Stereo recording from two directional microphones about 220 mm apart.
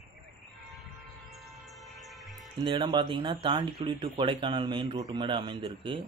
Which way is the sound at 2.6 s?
20° right (ahead or behind).